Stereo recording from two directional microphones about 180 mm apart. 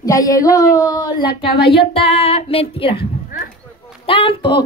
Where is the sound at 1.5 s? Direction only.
60° left (ahead or behind).